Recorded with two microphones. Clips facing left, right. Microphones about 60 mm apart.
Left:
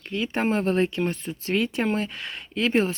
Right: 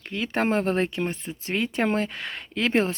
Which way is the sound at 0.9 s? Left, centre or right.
Right.